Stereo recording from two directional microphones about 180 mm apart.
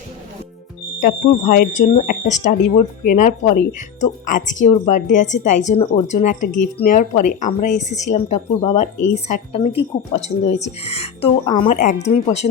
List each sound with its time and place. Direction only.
1.0 s a woman's voice: 50° left (ahead or behind); by 11.8 s 30° left (ahead or behind)
11.8 s a woman's voice: 40° left (ahead or behind)